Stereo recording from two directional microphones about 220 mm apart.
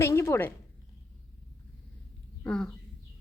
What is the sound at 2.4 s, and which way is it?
Speech, 5° left (ahead or behind).